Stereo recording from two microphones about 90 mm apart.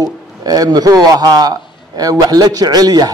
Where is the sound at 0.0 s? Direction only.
45° right (ahead or behind).